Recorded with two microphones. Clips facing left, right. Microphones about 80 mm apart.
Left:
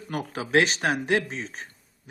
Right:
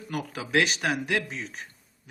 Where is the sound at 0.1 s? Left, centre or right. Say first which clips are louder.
Left 3 dB; left.